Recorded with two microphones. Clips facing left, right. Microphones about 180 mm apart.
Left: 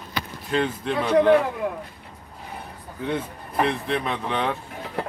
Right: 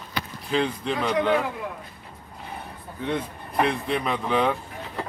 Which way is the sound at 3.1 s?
Centre (ahead or behind).